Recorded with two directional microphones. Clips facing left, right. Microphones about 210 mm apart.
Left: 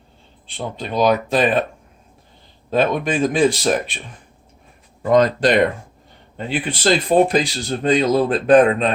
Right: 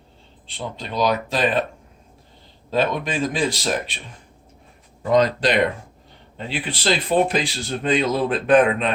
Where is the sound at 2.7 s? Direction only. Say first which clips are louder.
Left 4 dB; 50° left (ahead or behind).